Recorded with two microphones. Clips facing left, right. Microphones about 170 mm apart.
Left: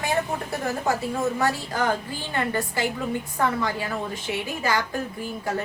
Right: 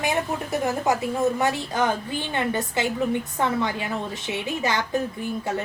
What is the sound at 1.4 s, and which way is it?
A woman's voice, 20° right (ahead or behind).